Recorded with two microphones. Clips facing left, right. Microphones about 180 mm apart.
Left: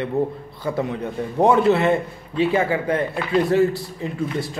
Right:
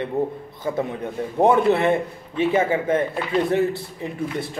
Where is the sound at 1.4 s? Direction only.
20° right (ahead or behind).